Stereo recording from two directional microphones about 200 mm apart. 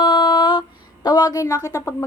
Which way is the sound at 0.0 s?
25° left (ahead or behind).